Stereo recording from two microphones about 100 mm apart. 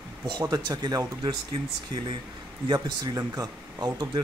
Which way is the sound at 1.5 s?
60° right (ahead or behind).